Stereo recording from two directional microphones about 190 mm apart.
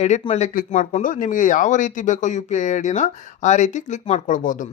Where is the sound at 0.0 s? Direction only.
35° left (ahead or behind).